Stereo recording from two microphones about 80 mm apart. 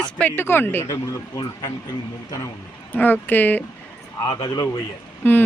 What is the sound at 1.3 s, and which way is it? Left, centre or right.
Speech, left.